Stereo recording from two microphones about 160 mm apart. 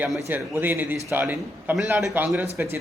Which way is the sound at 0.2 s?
15° right (ahead or behind).